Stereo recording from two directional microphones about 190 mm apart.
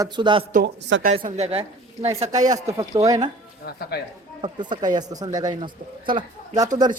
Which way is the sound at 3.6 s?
55° left (ahead or behind).